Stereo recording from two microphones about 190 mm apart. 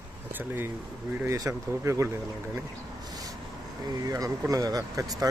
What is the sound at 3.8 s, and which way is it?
Speech, 20° right (ahead or behind).